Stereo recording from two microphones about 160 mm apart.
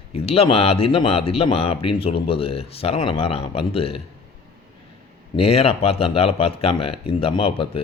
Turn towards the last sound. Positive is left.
turn(degrees=35)  # may be behind; listen again after turning